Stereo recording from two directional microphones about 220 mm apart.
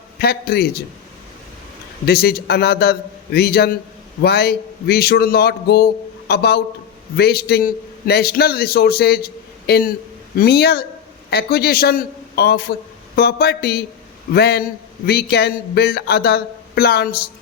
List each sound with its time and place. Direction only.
0.2 s a man's voice: 45° left (ahead or behind)
2.0 s a man's voice: 45° left (ahead or behind)